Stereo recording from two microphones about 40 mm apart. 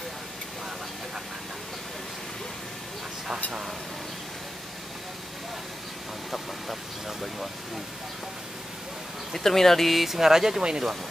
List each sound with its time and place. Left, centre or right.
6.3 s speech: centre
9.3 s speech: centre